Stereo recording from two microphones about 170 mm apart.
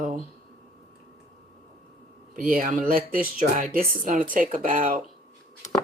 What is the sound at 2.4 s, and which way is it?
Speech, 55° right (ahead or behind).